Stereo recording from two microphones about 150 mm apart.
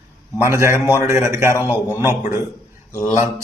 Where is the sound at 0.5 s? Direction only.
20° right (ahead or behind).